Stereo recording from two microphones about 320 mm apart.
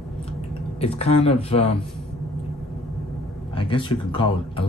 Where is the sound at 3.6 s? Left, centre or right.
Centre.